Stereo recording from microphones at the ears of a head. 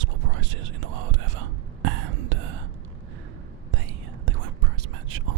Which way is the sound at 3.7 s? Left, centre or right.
Right.